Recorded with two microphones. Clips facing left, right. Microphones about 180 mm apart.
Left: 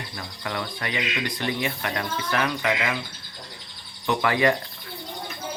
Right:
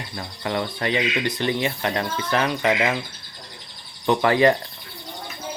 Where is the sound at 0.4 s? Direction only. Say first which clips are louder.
Right 6 dB; 30° right (ahead or behind).